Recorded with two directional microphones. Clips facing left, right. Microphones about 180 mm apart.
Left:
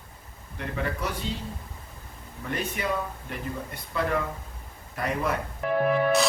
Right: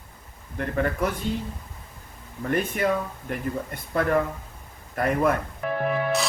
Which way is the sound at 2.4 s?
50° right (ahead or behind).